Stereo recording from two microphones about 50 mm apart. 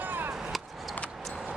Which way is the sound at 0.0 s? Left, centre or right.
Right.